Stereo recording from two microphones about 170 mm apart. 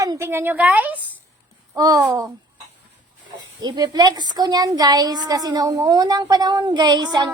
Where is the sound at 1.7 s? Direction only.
20° right (ahead or behind).